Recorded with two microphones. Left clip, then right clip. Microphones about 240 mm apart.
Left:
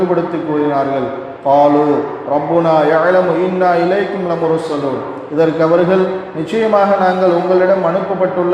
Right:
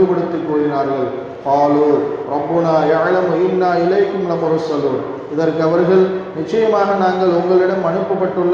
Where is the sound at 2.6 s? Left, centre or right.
Left.